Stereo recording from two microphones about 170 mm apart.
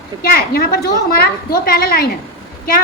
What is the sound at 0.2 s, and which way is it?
A woman's voice, 65° left (ahead or behind).